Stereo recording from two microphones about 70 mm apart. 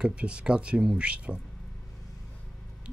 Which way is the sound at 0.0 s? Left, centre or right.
Centre.